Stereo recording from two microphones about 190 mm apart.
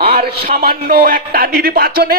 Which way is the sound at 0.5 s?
50° right (ahead or behind).